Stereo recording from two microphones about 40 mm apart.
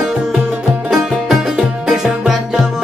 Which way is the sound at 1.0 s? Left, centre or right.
Centre.